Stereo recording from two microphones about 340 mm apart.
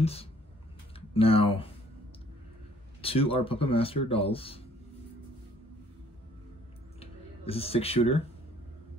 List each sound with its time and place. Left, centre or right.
0.0 s speech: centre
3.0 s speech: centre
7.0 s a sound: centre